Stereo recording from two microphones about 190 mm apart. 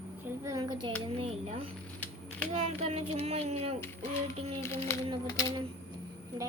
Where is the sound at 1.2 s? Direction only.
30° right (ahead or behind).